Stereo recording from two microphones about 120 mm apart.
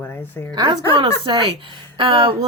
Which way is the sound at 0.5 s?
40° right (ahead or behind).